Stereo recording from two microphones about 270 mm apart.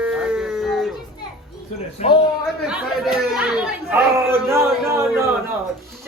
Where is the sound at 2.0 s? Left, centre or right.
Left.